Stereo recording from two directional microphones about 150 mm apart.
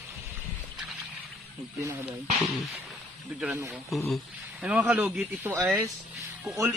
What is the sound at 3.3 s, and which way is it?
Speech, 10° right (ahead or behind).